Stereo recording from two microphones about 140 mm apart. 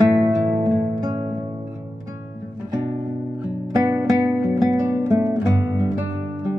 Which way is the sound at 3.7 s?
15° right (ahead or behind).